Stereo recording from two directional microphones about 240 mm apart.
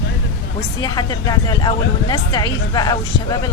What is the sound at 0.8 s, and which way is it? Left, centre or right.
Speech, centre.